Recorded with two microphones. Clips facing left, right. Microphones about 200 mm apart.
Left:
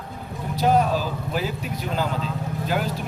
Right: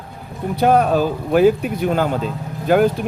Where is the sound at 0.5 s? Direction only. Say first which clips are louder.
Right 5 dB; 60° right (ahead or behind).